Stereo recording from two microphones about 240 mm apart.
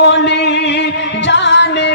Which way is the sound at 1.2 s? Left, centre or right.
Left.